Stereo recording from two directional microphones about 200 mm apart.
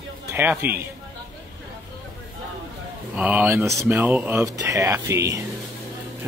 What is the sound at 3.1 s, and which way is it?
Speech, 10° right (ahead or behind).